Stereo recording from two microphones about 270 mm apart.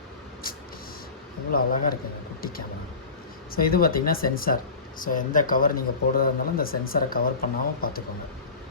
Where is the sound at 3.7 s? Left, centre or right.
Left.